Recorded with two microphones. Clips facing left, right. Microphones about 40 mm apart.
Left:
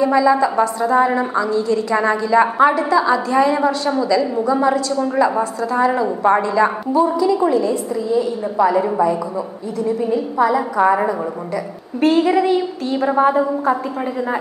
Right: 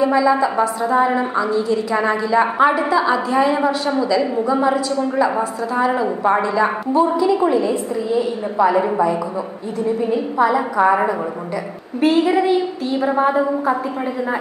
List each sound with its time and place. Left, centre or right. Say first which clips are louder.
0.0 s a woman's voice: left 1 dB; centre
2.7 s a woman's voice: left 1 dB; centre
6.9 s a woman's voice: even; centre
10.4 s a woman's voice: even; centre